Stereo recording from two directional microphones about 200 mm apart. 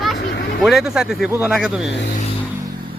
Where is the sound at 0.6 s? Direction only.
Centre (ahead or behind).